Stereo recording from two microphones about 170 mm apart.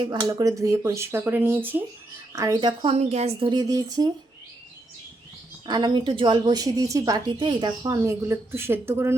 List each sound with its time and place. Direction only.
0.2 s a woman's voice: 20° right (ahead or behind)
2.9 s a woman's voice: 40° right (ahead or behind)
3.5 s a woman's voice: 20° right (ahead or behind)
5.6 s a woman's voice: 25° right (ahead or behind)